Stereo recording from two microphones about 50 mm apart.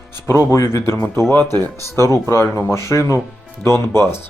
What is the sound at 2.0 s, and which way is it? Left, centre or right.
Speech, left.